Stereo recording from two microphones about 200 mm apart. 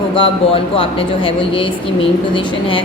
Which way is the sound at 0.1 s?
25° left (ahead or behind).